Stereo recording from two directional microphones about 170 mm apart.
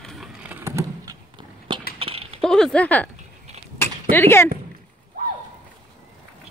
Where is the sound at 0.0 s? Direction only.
Centre (ahead or behind); by 1.1 s 15° right (ahead or behind).